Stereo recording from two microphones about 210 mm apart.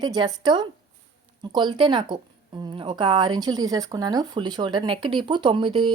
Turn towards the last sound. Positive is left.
turn(degrees=-25)  # may be behind; listen again after turning